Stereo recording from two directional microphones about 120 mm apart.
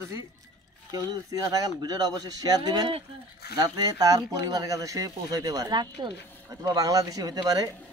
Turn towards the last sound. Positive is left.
turn(degrees=-35)  # may be behind; listen again after turning